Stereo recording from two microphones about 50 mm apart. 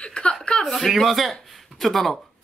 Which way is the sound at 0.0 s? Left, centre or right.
Centre.